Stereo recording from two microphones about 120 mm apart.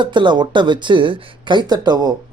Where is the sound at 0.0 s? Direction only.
40° right (ahead or behind).